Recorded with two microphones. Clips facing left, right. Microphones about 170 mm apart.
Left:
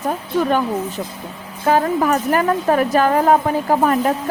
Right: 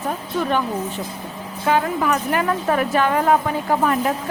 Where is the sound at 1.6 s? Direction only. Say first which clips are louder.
Left 3 dB; 40° left (ahead or behind).